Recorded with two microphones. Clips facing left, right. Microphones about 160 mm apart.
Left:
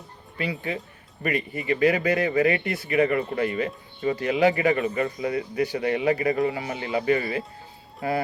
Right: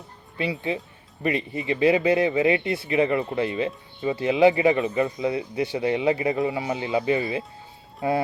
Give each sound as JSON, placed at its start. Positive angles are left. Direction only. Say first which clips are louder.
{"t": 0.3, "sound": "speech", "louder": "right 2 dB", "side_deg": -25}